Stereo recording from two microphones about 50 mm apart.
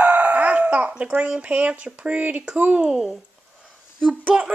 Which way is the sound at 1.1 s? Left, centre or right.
Right.